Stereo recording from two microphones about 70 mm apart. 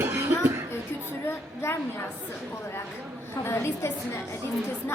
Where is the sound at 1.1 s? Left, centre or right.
Left.